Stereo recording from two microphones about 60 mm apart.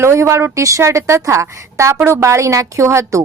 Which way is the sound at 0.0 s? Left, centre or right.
Right.